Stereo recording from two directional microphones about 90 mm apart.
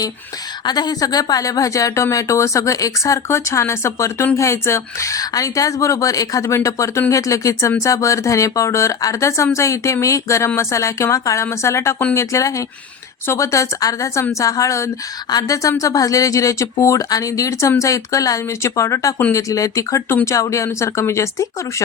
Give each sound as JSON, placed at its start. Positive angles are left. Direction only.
{"t": 0.6, "sound": "speech", "side_deg": 50}